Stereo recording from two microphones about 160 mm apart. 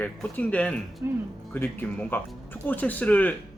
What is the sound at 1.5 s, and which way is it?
Speech, 10° left (ahead or behind).